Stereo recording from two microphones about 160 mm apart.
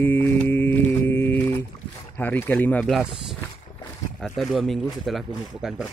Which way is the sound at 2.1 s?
10° left (ahead or behind).